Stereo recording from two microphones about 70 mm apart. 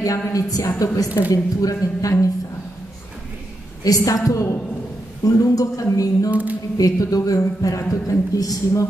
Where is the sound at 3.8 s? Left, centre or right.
Left.